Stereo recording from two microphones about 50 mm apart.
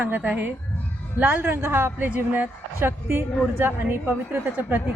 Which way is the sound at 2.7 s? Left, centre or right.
Right.